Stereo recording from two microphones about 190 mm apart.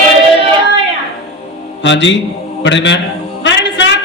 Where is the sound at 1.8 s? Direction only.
70° left (ahead or behind).